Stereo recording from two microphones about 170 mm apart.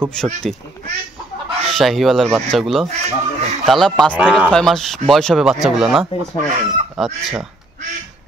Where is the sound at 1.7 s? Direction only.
Centre (ahead or behind).